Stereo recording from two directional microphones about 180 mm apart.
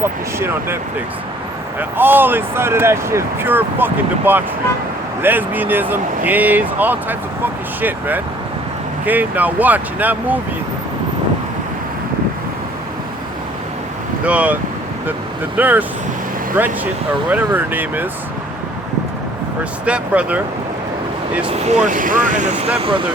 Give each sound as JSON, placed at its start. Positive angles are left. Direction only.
{"t": 0.0, "sound": "speech", "side_deg": -15}
{"t": 1.8, "sound": "speech", "side_deg": -10}
{"t": 14.3, "sound": "speech", "side_deg": -10}
{"t": 19.8, "sound": "speech", "side_deg": -5}
{"t": 21.7, "sound": "speech", "side_deg": -45}